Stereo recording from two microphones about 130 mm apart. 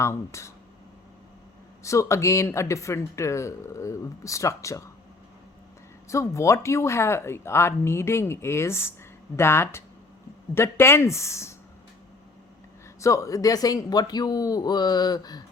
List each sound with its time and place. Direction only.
0.0 s speech: 20° left (ahead or behind)
1.8 s speech: 25° left (ahead or behind)
6.1 s speech: 20° left (ahead or behind)
13.0 s speech: 25° left (ahead or behind)